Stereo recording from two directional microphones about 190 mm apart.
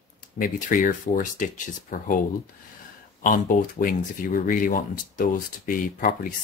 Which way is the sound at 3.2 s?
45° left (ahead or behind).